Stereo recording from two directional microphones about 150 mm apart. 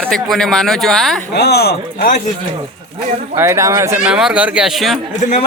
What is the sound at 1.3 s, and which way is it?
Speech, 90° left.